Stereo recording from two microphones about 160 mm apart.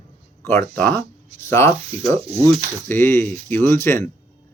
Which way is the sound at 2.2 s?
40° right (ahead or behind).